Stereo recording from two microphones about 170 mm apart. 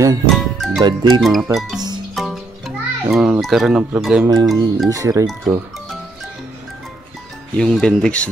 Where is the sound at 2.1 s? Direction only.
Centre (ahead or behind).